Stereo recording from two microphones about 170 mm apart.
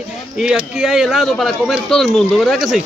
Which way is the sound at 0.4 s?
5° right (ahead or behind).